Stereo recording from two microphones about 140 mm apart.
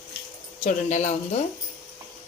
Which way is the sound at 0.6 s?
60° left (ahead or behind).